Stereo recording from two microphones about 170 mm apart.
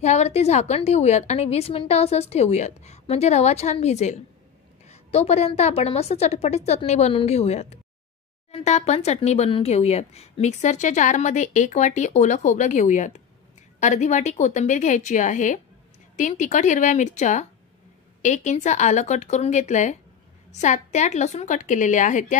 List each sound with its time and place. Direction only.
0.0 s a woman's voice: 40° left (ahead or behind)